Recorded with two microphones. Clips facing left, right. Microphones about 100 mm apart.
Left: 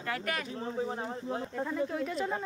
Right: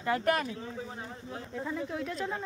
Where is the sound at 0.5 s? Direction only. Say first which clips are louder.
Left 6 dB; 35° left (ahead or behind).